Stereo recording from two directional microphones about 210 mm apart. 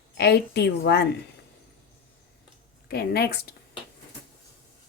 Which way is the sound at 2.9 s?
50° left (ahead or behind).